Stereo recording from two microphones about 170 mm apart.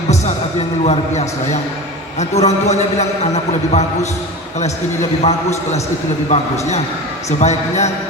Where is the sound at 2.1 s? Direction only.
40° left (ahead or behind).